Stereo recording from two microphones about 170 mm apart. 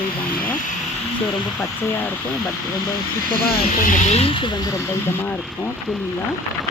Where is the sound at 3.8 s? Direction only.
35° left (ahead or behind).